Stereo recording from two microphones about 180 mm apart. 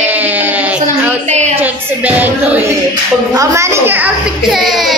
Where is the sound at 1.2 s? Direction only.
40° right (ahead or behind).